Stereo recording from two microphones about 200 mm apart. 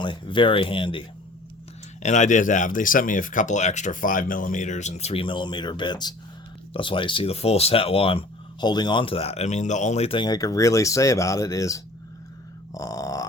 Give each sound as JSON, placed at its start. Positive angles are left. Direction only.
{"t": 0.0, "sound": "speech", "side_deg": 25}
{"t": 2.0, "sound": "speech", "side_deg": 35}
{"t": 12.7, "sound": "burping", "side_deg": 15}